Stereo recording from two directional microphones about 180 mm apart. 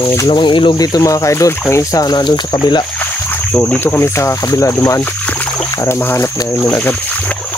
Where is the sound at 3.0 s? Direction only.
10° left (ahead or behind).